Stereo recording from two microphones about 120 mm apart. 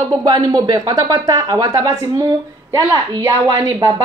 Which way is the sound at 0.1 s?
35° right (ahead or behind).